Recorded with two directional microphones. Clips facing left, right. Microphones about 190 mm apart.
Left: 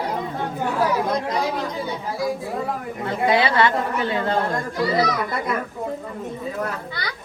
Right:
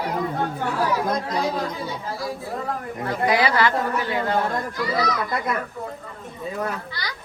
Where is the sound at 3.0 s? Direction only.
25° left (ahead or behind).